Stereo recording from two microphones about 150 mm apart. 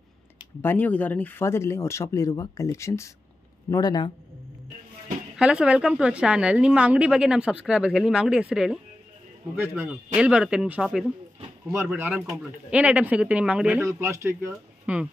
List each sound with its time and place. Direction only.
0.6 s speech: 10° left (ahead or behind); by 4.1 s 30° left (ahead or behind)
5.4 s a woman's voice: 5° right (ahead or behind)
14.5 s speech: 5° right (ahead or behind)